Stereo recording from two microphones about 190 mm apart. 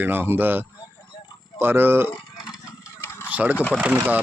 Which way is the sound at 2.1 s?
20° left (ahead or behind).